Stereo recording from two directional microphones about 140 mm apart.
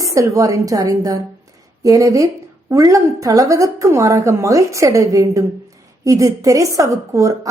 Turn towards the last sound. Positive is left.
turn(degrees=-20)  # may be behind; listen again after turning